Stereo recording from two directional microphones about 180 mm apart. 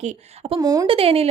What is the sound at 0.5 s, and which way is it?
Speech, 20° right (ahead or behind).